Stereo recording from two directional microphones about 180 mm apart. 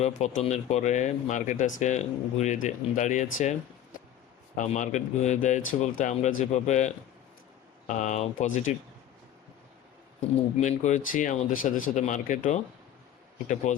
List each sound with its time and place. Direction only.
0.0 s speech: 40° left (ahead or behind)
4.5 s speech: 40° left (ahead or behind)
10.2 s speech: 40° left (ahead or behind)
13.7 s speech: 40° left (ahead or behind)